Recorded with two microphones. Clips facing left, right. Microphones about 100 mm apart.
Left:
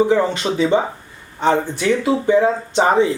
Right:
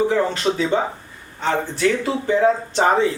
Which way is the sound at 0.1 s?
10° left (ahead or behind).